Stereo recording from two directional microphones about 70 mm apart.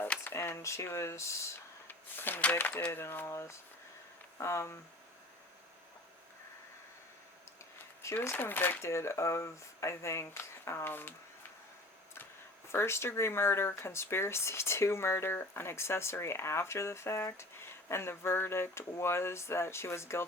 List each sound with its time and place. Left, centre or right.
0.3 s speech: left
1.9 s a sound: left
2.6 s speech: left
8.2 s speech: left
8.4 s speech: left
8.9 s speech: left
12.1 s speech: left